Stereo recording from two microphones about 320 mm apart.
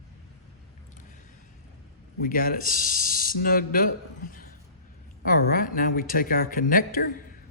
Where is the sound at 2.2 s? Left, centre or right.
Left.